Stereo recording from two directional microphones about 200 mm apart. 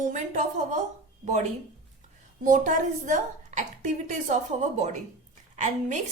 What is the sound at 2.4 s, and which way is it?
A woman's voice, 40° right (ahead or behind).